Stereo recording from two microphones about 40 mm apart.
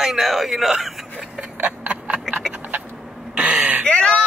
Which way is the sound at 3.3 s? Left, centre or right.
Right.